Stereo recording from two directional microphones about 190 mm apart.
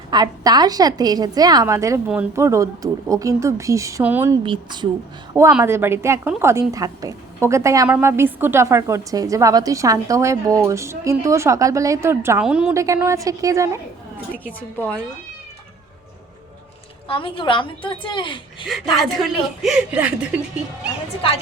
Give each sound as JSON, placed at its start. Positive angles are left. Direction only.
{"t": 0.1, "sound": "a woman's voice", "side_deg": -20}
{"t": 4.4, "sound": "a woman's voice", "side_deg": -25}
{"t": 5.3, "sound": "a woman's voice", "side_deg": -10}
{"t": 12.7, "sound": "a woman's voice", "side_deg": -15}
{"t": 14.3, "sound": "a woman's voice", "side_deg": 10}
{"t": 17.1, "sound": "a woman's voice", "side_deg": 25}
{"t": 19.6, "sound": "speech", "side_deg": -5}